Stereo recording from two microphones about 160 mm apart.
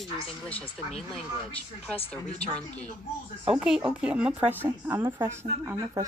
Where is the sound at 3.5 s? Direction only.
5° right (ahead or behind).